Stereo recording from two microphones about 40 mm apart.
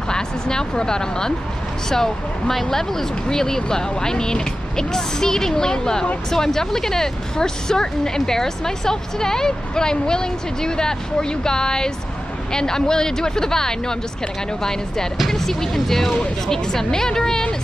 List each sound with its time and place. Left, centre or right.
0.1 s a woman's voice: centre